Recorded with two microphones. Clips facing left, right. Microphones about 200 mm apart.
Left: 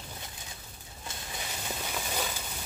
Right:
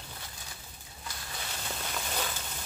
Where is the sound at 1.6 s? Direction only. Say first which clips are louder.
Left 1 dB; 10° left (ahead or behind).